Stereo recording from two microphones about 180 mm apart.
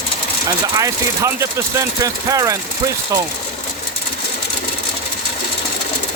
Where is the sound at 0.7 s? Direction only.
15° right (ahead or behind).